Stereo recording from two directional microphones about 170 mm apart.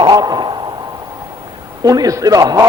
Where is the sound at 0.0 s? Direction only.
25° right (ahead or behind).